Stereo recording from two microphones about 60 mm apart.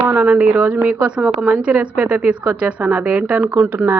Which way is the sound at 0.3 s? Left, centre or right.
Right.